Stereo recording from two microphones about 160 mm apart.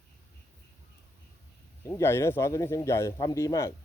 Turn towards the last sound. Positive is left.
turn(degrees=20)  # may be behind; listen again after turning